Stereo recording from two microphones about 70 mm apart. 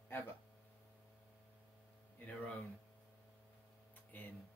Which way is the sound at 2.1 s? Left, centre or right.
Left.